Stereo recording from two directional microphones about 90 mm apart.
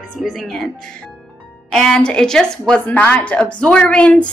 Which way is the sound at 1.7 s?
5° left (ahead or behind).